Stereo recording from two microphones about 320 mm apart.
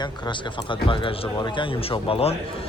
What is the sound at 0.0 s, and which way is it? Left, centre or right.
Speech, centre.